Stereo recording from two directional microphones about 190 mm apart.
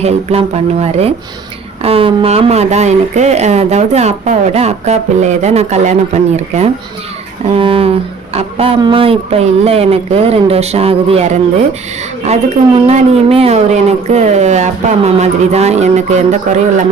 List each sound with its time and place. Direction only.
0.0 s speech: 35° right (ahead or behind)
12.2 s speech: 35° right (ahead or behind)